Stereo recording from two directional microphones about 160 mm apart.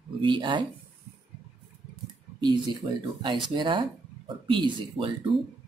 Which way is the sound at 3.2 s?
30° right (ahead or behind).